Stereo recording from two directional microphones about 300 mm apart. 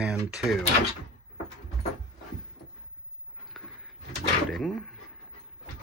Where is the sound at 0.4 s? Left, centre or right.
Centre.